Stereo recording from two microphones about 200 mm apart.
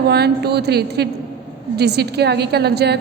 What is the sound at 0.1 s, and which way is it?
A woman's voice, 55° right (ahead or behind).